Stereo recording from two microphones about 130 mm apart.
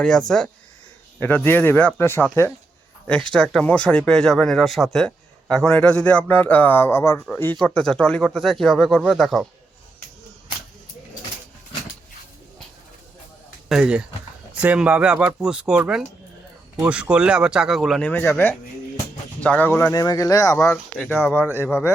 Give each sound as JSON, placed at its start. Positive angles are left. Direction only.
{"t": 0.0, "sound": "speech", "side_deg": 5}
{"t": 3.3, "sound": "speech", "side_deg": 5}
{"t": 7.6, "sound": "speech", "side_deg": 5}
{"t": 13.7, "sound": "speech", "side_deg": -5}
{"t": 18.1, "sound": "speech", "side_deg": 15}
{"t": 19.9, "sound": "speech", "side_deg": 30}
{"t": 20.6, "sound": "speech", "side_deg": 5}